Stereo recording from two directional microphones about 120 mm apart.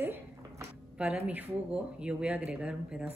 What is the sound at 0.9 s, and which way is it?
Speech, 10° right (ahead or behind).